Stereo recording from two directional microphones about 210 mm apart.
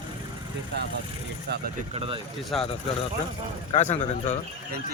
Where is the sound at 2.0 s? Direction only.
25° right (ahead or behind).